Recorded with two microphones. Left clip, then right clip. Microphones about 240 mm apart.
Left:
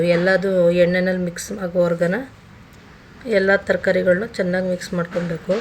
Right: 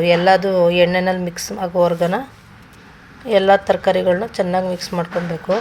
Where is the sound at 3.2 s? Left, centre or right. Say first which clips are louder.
Right 4 dB; right.